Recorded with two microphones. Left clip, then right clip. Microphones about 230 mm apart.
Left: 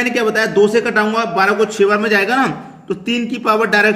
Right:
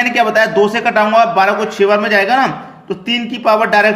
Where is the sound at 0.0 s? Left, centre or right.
Centre.